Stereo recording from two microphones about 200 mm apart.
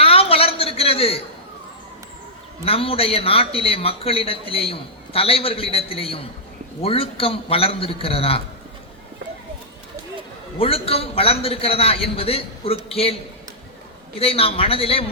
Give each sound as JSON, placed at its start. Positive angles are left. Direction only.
{"t": 0.0, "sound": "a sound", "side_deg": 30}
{"t": 2.6, "sound": "a man's voice", "side_deg": 30}
{"t": 10.6, "sound": "a man's voice", "side_deg": 30}
{"t": 14.2, "sound": "a man's voice", "side_deg": 30}